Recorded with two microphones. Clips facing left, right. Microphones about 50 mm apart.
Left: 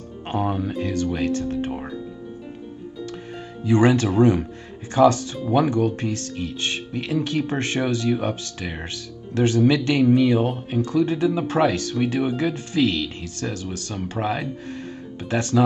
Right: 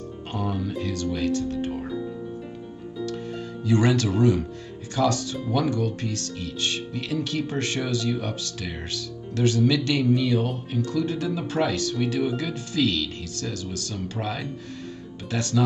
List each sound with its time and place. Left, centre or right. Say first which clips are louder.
0.3 s speech: left 5 dB; left
3.6 s speech: left 4 dB; left